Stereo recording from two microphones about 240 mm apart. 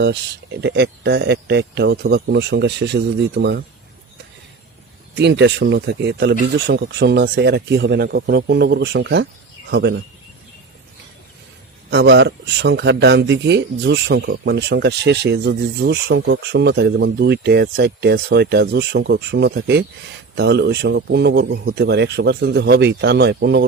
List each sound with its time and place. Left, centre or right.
0.0 s speech: right
5.1 s speech: right
11.9 s speech: right